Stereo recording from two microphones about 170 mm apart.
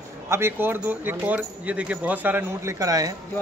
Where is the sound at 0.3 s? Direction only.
15° right (ahead or behind).